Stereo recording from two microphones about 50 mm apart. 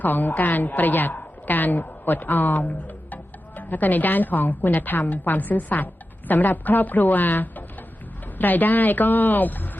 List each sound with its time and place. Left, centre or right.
0.0 s a woman's voice: left